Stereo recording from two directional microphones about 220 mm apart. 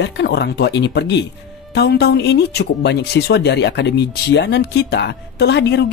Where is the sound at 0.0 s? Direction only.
50° left (ahead or behind).